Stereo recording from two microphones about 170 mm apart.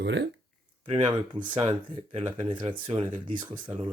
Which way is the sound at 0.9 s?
30° right (ahead or behind).